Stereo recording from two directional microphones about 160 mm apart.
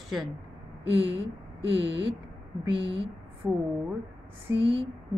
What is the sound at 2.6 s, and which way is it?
Speech, 35° right (ahead or behind).